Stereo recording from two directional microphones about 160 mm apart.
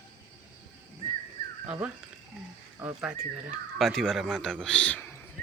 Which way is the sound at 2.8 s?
10° right (ahead or behind).